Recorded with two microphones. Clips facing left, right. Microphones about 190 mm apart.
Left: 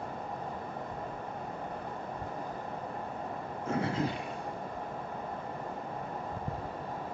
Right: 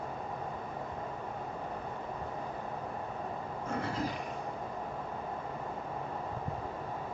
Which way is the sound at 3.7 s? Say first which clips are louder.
Left 4 dB; 25° left (ahead or behind).